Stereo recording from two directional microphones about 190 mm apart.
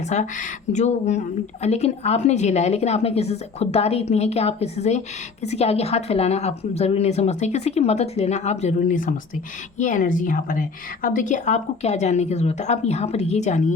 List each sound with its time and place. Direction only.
0.1 s a woman's voice: 40° left (ahead or behind)